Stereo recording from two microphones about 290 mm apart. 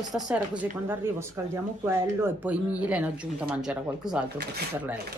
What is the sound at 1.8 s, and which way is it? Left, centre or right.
Speech, centre.